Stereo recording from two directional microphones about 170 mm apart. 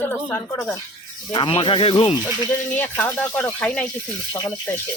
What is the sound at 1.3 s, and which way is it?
Speech, 30° left (ahead or behind).